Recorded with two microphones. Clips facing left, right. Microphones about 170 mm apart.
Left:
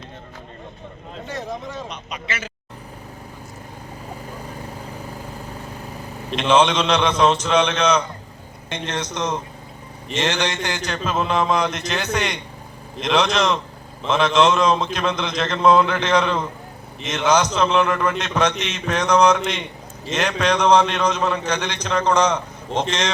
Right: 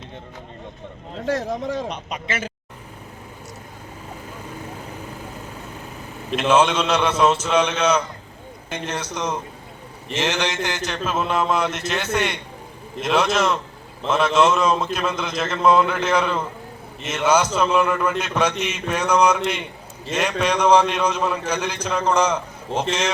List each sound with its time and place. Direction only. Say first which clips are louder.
1.2 s speech: right 6 dB; 90° right
1.9 s speech: right 3 dB; 50° right (ahead or behind)
6.3 s a man's voice: left 1 dB; 5° right (ahead or behind)